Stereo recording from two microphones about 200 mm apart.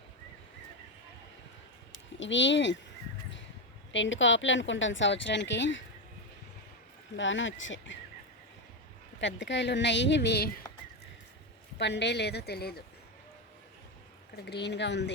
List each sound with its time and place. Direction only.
2.1 s speech: 65° left (ahead or behind)
3.9 s a woman's voice: 70° left (ahead or behind)
7.2 s a woman's voice: 70° left (ahead or behind)
9.2 s speech: 65° left (ahead or behind)
11.8 s speech: 60° left (ahead or behind)
14.3 s speech: 55° left (ahead or behind)